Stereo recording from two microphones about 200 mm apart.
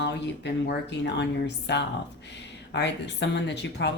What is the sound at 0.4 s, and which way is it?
Speech, 60° left (ahead or behind).